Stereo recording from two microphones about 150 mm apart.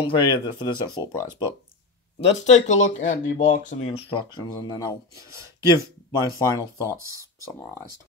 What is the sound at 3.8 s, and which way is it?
Speech, 35° left (ahead or behind).